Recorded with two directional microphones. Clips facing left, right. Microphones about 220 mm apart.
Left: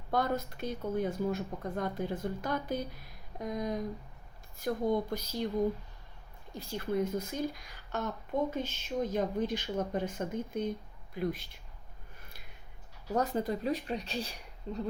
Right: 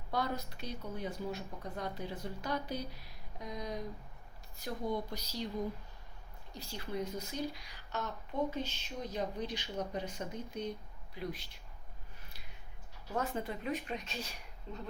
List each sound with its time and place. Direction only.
0.1 s speech: 50° left (ahead or behind)
6.5 s speech: 50° left (ahead or behind)
13.1 s speech: 40° left (ahead or behind)